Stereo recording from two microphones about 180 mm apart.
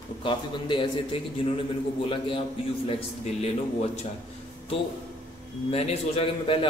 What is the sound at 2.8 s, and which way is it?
A man's voice, 35° left (ahead or behind).